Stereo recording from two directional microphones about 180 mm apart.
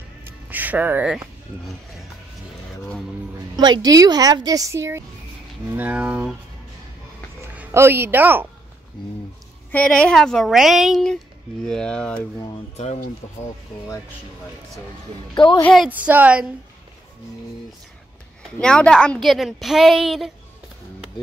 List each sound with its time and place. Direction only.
0.2 s music: 10° right (ahead or behind)
3.5 s a woman's voice: 25° right (ahead or behind); by 6.3 s 5° right (ahead or behind)
7.5 s speech: 15° right (ahead or behind)
9.7 s a woman's voice: 5° left (ahead or behind)
12.7 s speech: 40° left (ahead or behind)
15.3 s a woman's voice: 25° left (ahead or behind)
15.6 s a woman's voice: centre (ahead or behind)
15.9 s speech: 10° right (ahead or behind)
18.6 s a woman's voice: 5° left (ahead or behind)